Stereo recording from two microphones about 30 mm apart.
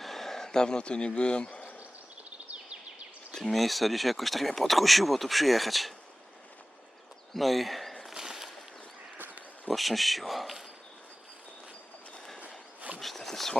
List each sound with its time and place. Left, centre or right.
0.0 s speech: centre; by 1.5 s left
3.3 s speech: centre
7.3 s speech: centre
8.1 s a sound: centre
9.1 s a sound: right
9.6 s speech: centre
13.0 s speech: centre